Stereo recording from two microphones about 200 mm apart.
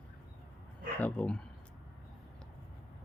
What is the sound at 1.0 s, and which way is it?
Speech, 5° left (ahead or behind).